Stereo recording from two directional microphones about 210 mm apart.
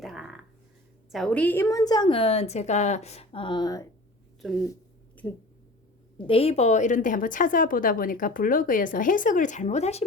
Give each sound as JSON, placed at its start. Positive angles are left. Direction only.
{"t": 0.0, "sound": "a sound", "side_deg": 0}
{"t": 1.1, "sound": "a woman's voice", "side_deg": 5}
{"t": 4.4, "sound": "speech", "side_deg": 0}
{"t": 6.1, "sound": "a woman's voice", "side_deg": 25}